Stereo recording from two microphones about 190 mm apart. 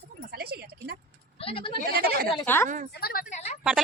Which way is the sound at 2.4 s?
10° left (ahead or behind).